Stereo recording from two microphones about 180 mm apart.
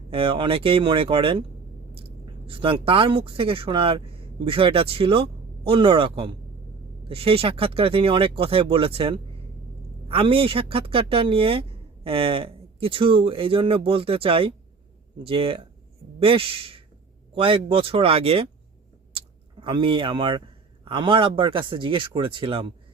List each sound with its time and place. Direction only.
0.1 s speech: 30° right (ahead or behind)
19.1 s a sound: 25° right (ahead or behind)
20.8 s speech: 30° right (ahead or behind)